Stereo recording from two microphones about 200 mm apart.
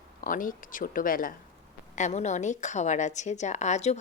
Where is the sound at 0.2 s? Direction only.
45° left (ahead or behind).